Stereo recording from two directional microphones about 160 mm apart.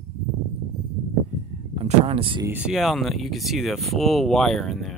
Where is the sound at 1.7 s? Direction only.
35° right (ahead or behind).